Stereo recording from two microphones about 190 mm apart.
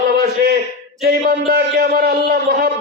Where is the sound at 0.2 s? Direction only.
50° right (ahead or behind).